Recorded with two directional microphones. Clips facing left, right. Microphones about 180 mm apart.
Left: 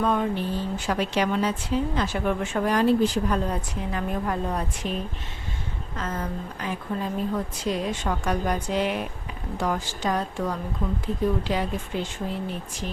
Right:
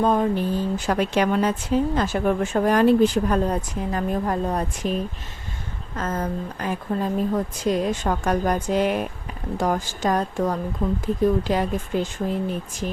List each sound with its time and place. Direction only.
0.0 s speech: 35° right (ahead or behind)
6.0 s speech: 45° right (ahead or behind)